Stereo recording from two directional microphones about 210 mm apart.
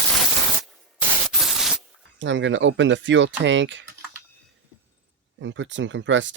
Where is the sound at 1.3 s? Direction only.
Centre (ahead or behind).